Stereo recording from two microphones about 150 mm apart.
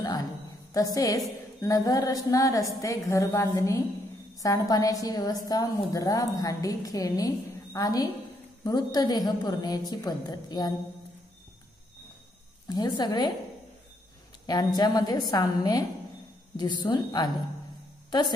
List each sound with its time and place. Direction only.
0.9 s a woman's voice: 25° left (ahead or behind)
12.6 s a woman's voice: 25° left (ahead or behind)
14.4 s a woman's voice: 25° left (ahead or behind)